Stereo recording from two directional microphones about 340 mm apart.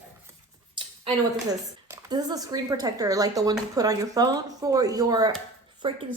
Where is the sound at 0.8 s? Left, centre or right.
Centre.